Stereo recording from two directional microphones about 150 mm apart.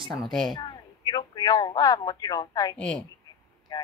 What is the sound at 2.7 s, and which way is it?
Speech, 5° left (ahead or behind).